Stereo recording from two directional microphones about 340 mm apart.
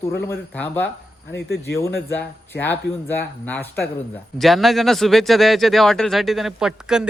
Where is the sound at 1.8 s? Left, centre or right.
Centre.